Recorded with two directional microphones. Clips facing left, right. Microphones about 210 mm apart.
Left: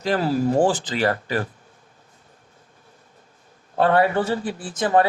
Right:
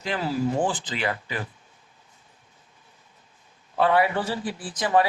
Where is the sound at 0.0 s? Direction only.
45° left (ahead or behind).